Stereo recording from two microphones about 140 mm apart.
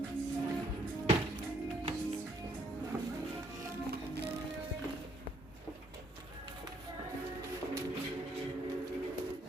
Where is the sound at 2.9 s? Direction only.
25° right (ahead or behind).